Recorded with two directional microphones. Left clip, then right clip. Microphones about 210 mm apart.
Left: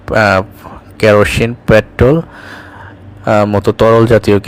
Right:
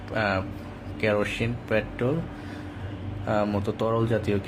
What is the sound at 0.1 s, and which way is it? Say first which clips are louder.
A man's voice: left 17 dB; 50° left (ahead or behind).